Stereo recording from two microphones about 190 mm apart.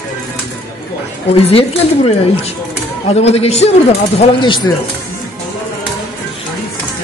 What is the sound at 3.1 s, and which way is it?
Speech, 35° left (ahead or behind).